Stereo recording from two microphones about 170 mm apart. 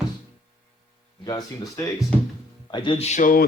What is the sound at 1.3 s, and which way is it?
Speech, 20° left (ahead or behind).